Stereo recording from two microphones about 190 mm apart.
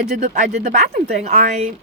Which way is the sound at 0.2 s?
40° right (ahead or behind).